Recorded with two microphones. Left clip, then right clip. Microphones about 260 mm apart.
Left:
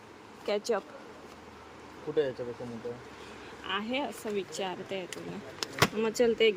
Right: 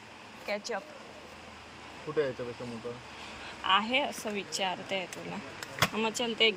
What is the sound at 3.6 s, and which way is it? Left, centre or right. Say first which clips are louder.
Speech: right 6 dB; centre.